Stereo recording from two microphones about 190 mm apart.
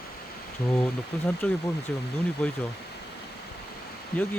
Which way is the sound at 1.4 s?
5° left (ahead or behind).